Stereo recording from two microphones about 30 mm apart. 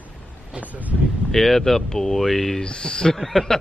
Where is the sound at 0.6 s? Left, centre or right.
Right.